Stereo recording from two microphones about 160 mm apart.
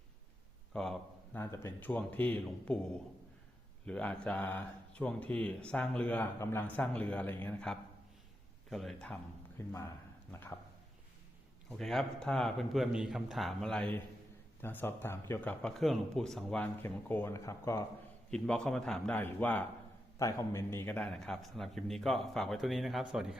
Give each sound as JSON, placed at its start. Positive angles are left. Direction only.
{"t": 0.7, "sound": "a sound", "side_deg": 5}
{"t": 1.4, "sound": "a man's voice", "side_deg": 15}
{"t": 9.6, "sound": "speech", "side_deg": 15}
{"t": 11.8, "sound": "a man's voice", "side_deg": 0}
{"t": 18.3, "sound": "a man's voice", "side_deg": 5}